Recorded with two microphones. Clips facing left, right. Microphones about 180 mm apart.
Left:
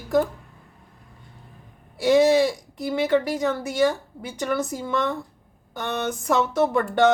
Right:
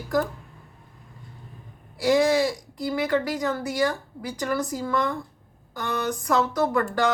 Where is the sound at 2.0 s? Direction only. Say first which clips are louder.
Left 3 dB; 25° left (ahead or behind).